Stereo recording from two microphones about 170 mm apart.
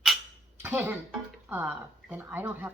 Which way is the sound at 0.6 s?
15° right (ahead or behind).